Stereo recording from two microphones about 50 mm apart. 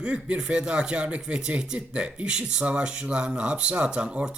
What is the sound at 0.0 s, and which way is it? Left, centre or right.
Speech, right.